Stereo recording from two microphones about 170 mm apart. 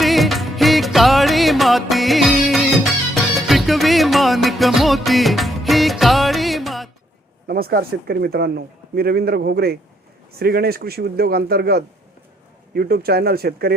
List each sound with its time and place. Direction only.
0.0 s music: centre (ahead or behind)
7.4 s a man's voice: 65° right (ahead or behind)